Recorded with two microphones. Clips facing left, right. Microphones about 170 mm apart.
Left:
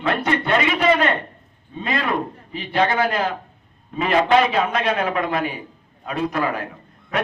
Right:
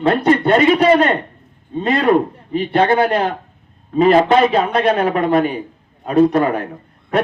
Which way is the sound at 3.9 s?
35° right (ahead or behind).